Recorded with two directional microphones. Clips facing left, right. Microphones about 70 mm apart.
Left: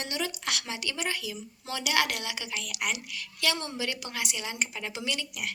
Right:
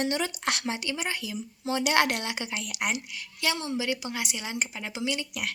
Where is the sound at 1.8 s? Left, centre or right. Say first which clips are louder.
Right 3 dB; right.